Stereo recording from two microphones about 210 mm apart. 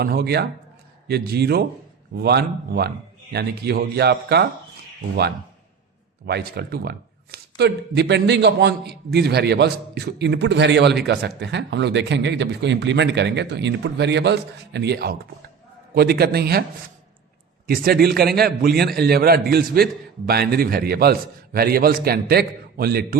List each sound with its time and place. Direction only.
0.0 s speech: 50° right (ahead or behind)
6.2 s speech: 50° right (ahead or behind)
17.7 s speech: 45° right (ahead or behind)